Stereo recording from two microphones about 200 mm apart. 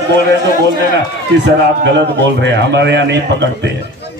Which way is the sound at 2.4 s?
60° right (ahead or behind).